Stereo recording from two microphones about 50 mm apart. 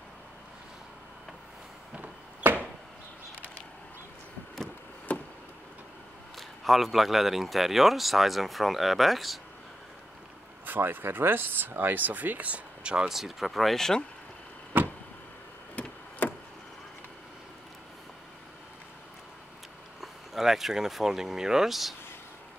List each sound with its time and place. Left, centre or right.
5.1 s a sound: left
6.3 s a man's voice: centre
10.6 s speech: right
13.1 s a man's voice: centre
14.7 s vehicle: right
20.0 s speech: centre